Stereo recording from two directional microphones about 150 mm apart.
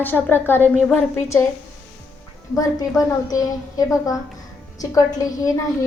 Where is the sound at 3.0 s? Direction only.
25° left (ahead or behind).